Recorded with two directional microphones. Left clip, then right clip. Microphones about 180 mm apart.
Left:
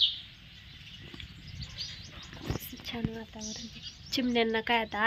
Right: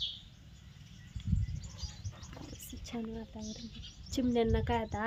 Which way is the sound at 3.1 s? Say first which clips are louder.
Left 4 dB; 10° left (ahead or behind).